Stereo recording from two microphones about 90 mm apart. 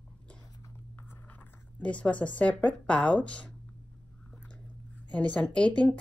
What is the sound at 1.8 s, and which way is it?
Speech, 15° left (ahead or behind).